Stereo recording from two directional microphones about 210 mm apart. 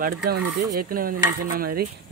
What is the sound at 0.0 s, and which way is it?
Stir, 45° right (ahead or behind).